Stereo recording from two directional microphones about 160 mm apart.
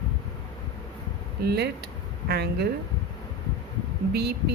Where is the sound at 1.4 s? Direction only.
90° right.